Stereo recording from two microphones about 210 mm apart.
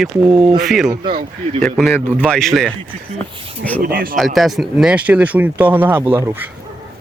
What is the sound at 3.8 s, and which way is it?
Speech, 45° right (ahead or behind).